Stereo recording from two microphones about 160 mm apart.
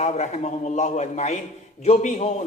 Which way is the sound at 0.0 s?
45° left (ahead or behind).